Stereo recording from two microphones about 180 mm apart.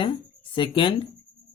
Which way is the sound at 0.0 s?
30° left (ahead or behind).